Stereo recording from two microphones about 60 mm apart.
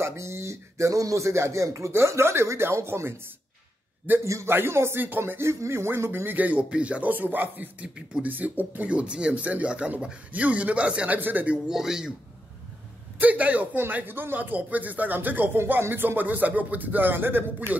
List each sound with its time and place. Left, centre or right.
0.0 s speech: right
4.2 s a man's voice: right
4.5 s speech: right
5.0 s speech: right
5.4 s speech: right
6.3 s speech: right
11.1 s speech: right
11.4 s speech: centre
11.7 s speech: centre
13.2 s speech: right